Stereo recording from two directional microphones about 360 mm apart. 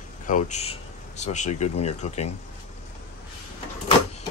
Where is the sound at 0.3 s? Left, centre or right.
Centre.